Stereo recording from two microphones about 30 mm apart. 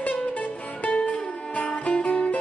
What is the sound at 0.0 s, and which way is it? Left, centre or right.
Music, left.